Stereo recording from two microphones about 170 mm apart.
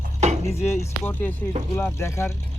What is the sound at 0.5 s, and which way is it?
Speech, 40° left (ahead or behind).